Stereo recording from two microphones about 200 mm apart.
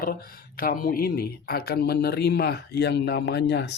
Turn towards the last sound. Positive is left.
turn(degrees=60)  # may be behind; listen again after turning